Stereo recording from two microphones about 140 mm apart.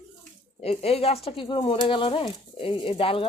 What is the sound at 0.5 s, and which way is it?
Speech, 45° left (ahead or behind).